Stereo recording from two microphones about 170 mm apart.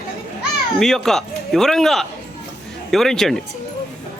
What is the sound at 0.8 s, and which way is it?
Speech, 5° left (ahead or behind).